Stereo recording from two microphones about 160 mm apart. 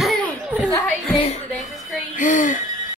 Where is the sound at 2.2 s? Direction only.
55° left (ahead or behind).